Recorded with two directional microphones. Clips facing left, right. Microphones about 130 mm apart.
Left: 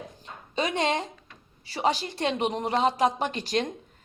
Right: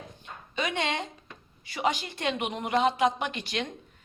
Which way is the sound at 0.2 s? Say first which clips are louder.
Left 3 dB; 35° left (ahead or behind).